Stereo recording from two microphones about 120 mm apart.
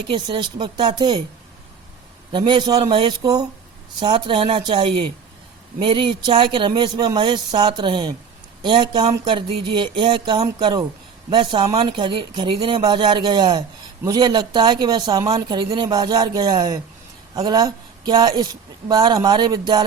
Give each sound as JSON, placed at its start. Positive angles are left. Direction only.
{"t": 0.1, "sound": "a man's voice", "side_deg": -40}
{"t": 2.3, "sound": "a man's voice", "side_deg": -40}
{"t": 2.9, "sound": "speech", "side_deg": -45}
{"t": 3.2, "sound": "a man's voice", "side_deg": -35}
{"t": 11.6, "sound": "speech", "side_deg": -60}
{"t": 11.9, "sound": "a man's voice", "side_deg": -40}
{"t": 15.4, "sound": "a man's voice", "side_deg": -40}